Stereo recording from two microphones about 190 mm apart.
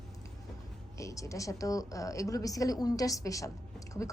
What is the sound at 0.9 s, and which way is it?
A woman's voice, 15° left (ahead or behind).